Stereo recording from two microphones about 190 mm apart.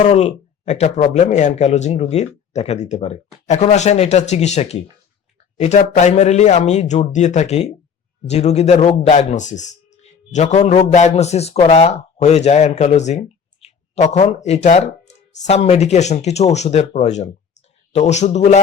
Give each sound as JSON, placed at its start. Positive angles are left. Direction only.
{"t": 0.0, "sound": "speech", "side_deg": 35}